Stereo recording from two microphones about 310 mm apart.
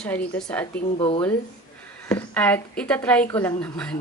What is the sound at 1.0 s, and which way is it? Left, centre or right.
Speech, centre.